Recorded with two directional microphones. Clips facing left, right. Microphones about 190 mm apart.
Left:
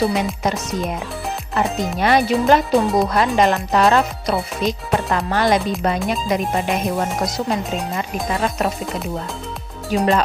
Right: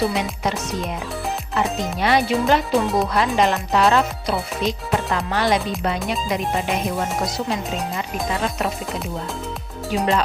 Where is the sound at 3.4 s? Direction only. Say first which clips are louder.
Left 2 dB; 50° left (ahead or behind).